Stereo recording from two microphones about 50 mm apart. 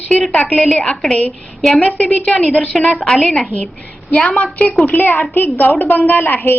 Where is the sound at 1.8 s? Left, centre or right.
Left.